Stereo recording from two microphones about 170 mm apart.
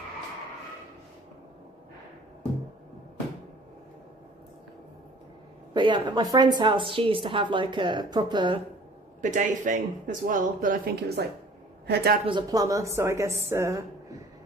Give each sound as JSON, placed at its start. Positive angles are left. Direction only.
{"t": 5.7, "sound": "a woman's voice", "side_deg": -25}
{"t": 9.2, "sound": "a woman's voice", "side_deg": -50}
{"t": 12.2, "sound": "a woman's voice", "side_deg": -30}